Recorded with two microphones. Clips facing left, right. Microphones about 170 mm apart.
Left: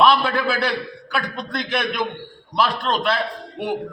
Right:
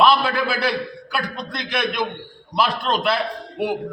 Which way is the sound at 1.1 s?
Centre (ahead or behind).